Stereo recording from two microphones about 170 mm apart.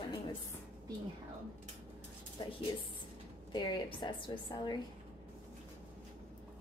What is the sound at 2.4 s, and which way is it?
A woman's voice, 25° left (ahead or behind).